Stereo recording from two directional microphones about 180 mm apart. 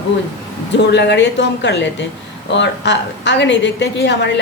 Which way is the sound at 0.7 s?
75° left (ahead or behind).